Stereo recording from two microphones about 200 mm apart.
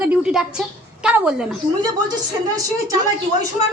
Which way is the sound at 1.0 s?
5° right (ahead or behind).